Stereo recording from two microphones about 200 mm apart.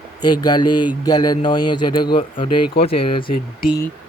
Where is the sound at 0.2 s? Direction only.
20° left (ahead or behind).